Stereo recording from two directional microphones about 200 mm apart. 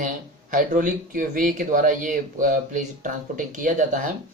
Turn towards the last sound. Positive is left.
turn(degrees=-40)  # may be behind; listen again after turning